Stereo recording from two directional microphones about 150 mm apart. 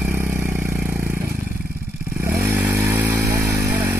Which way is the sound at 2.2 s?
15° right (ahead or behind).